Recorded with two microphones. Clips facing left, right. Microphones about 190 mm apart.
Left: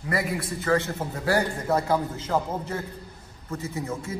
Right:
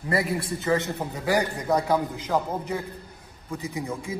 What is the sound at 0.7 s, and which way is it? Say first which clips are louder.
A man's voice: left 1 dB; 20° right (ahead or behind).